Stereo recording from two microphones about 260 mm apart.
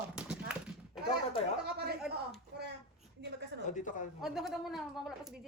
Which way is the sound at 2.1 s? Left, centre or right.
Centre.